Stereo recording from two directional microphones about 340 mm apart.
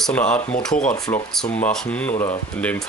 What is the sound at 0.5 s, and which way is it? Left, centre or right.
Speech, left.